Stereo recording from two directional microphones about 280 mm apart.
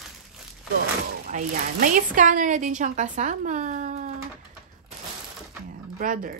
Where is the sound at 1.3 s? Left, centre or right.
Right.